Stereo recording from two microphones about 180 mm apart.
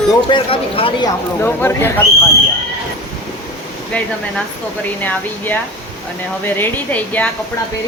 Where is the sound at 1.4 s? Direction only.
10° left (ahead or behind).